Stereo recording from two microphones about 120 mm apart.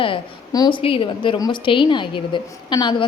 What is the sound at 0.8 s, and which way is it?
A woman's voice, 50° left (ahead or behind).